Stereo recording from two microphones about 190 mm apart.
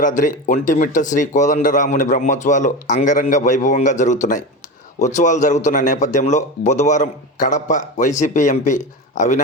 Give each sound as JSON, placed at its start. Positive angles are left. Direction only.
{"t": 0.0, "sound": "speech", "side_deg": 45}